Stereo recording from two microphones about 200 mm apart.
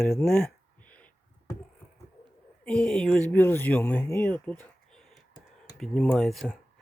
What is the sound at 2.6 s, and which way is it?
Speech, 5° left (ahead or behind).